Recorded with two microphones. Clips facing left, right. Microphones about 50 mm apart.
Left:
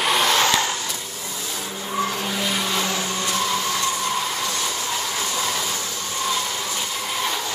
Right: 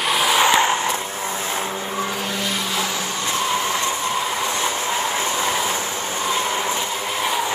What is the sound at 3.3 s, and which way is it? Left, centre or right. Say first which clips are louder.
Vehicle: right 3 dB; right.